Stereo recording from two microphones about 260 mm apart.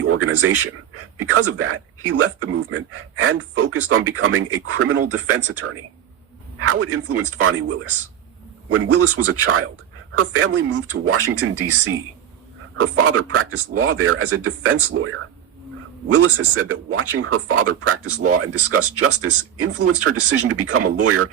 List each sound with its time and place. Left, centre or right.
0.0 s speech: right
10.8 s speech: right